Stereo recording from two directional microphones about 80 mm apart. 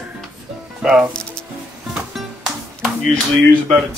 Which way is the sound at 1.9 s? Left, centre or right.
Centre.